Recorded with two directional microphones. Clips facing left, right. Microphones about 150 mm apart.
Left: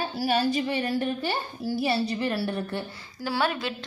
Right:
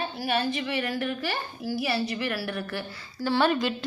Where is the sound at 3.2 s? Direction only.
5° left (ahead or behind).